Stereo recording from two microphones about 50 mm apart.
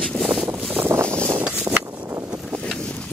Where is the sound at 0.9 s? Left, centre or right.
Right.